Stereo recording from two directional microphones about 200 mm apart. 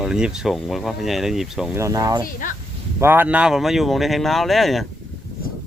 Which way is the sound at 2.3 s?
45° left (ahead or behind).